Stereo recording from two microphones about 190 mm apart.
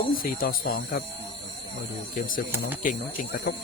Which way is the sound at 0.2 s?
50° left (ahead or behind).